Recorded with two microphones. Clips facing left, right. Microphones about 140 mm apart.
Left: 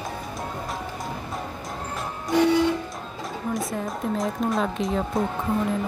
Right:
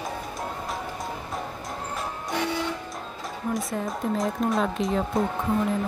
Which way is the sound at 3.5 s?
Centre (ahead or behind).